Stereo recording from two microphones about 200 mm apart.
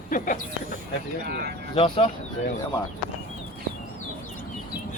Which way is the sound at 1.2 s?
50° right (ahead or behind).